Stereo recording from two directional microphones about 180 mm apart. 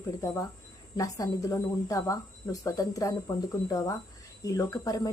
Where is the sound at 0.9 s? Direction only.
20° left (ahead or behind).